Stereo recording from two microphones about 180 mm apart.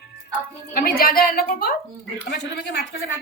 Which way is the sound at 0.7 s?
55° left (ahead or behind).